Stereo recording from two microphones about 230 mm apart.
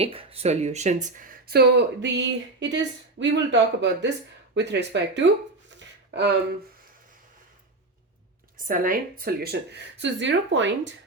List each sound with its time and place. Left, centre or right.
0.0 s speech: right
8.5 s speech: right